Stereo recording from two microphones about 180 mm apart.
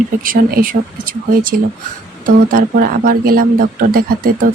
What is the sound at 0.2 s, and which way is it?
Speech, 50° right (ahead or behind).